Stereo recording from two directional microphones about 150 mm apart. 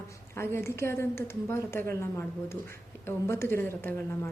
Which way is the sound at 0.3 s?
15° left (ahead or behind).